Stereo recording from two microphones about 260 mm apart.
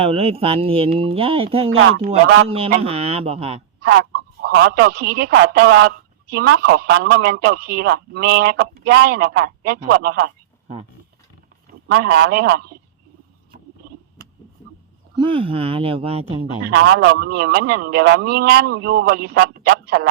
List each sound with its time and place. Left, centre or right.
0.0 s speech: right
1.7 s speech: right
2.5 s speech: right
3.8 s a man's voice: right
11.9 s a man's voice: right
15.1 s speech: centre
16.6 s a man's voice: right